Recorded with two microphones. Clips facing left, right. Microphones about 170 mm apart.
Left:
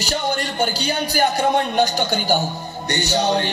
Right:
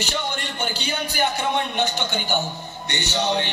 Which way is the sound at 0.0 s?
40° left (ahead or behind).